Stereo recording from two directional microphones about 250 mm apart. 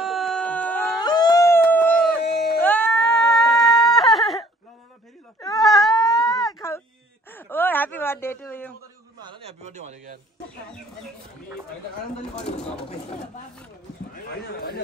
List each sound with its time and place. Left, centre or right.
0.0 s a sound: centre
2.2 s baby cry: left
2.6 s goat: centre
5.6 s a sound: centre
9.2 s a man's voice: right
12.4 s speech: left